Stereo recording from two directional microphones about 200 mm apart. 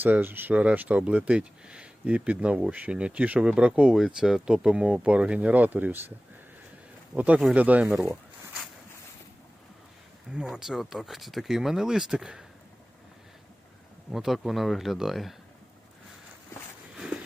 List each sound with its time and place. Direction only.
0.0 s speech: 10° right (ahead or behind)
10.3 s speech: 5° right (ahead or behind)
14.1 s speech: centre (ahead or behind)